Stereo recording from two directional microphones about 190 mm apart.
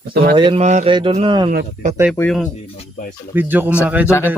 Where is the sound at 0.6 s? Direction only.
35° right (ahead or behind).